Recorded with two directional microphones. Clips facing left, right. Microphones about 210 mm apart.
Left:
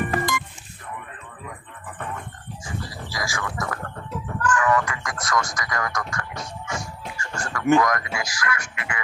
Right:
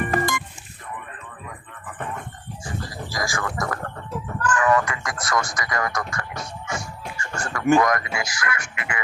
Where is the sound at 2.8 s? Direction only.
45° right (ahead or behind).